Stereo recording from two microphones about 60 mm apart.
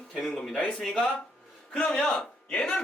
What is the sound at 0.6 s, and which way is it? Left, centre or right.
Speech, centre.